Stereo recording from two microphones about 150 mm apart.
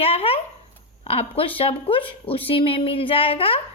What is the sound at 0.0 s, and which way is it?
A woman's voice, 40° left (ahead or behind).